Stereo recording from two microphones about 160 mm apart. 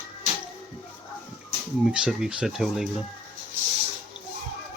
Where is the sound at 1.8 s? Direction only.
5° right (ahead or behind).